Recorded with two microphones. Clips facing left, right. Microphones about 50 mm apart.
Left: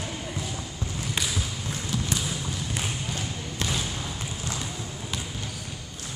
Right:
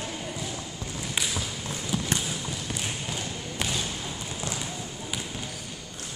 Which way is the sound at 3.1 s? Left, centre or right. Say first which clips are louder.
Left 1 dB; centre.